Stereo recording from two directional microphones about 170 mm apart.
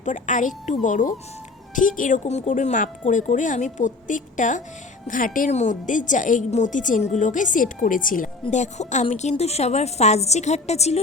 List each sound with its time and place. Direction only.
0.0 s a woman's voice: 45° left (ahead or behind)